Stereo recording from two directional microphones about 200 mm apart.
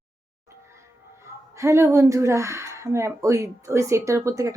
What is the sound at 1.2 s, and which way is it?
Speech, 15° right (ahead or behind).